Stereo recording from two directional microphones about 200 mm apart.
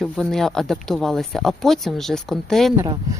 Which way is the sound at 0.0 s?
Centre (ahead or behind).